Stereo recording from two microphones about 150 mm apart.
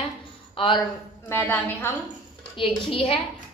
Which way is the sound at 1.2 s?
15° left (ahead or behind).